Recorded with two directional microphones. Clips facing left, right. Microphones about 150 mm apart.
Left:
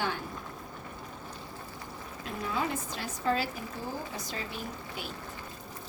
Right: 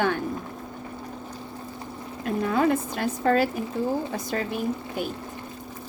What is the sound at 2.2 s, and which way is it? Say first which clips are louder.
Speech: right 11 dB; 60° right (ahead or behind).